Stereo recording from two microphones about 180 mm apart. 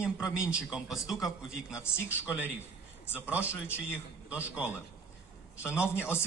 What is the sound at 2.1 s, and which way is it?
Speech, 15° left (ahead or behind).